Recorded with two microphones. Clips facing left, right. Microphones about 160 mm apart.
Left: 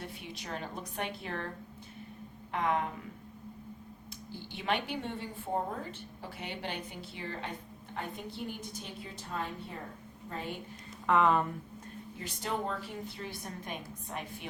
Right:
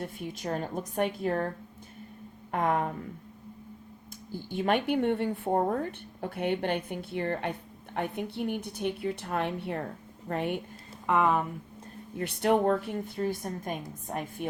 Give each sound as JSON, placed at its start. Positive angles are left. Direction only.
{"t": 0.0, "sound": "a woman's voice", "side_deg": -45}
{"t": 2.5, "sound": "a woman's voice", "side_deg": -50}
{"t": 4.3, "sound": "a woman's voice", "side_deg": -45}
{"t": 11.2, "sound": "speech", "side_deg": -10}
{"t": 12.1, "sound": "a woman's voice", "side_deg": -60}